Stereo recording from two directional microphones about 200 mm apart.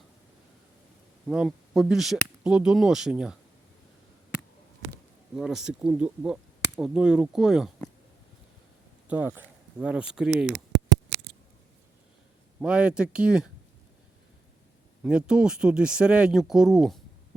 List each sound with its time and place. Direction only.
1.3 s speech: 5° right (ahead or behind)
5.4 s speech: centre (ahead or behind)
9.0 s speech: 10° right (ahead or behind)
10.3 s speech: 60° right (ahead or behind)
12.6 s speech: 5° right (ahead or behind)
15.0 s speech: 5° right (ahead or behind)